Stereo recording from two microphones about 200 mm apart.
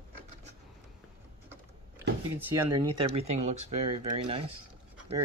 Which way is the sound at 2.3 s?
15° right (ahead or behind).